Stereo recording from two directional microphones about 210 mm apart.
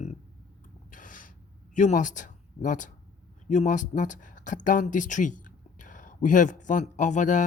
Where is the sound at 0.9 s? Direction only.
40° left (ahead or behind).